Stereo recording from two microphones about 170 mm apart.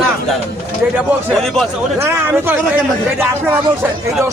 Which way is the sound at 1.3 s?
Centre (ahead or behind).